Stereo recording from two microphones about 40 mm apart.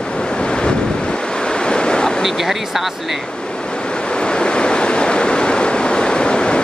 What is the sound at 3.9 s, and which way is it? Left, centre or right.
Waves, left.